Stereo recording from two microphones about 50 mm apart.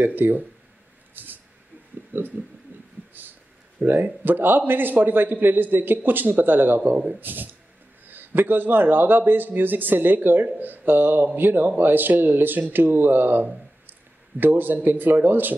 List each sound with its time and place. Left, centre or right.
0.0 s a man's voice: right
1.1 s a sound: right
2.1 s a man's voice: right
2.7 s heart murmur: right
3.2 s a sound: right
3.8 s a man's voice: right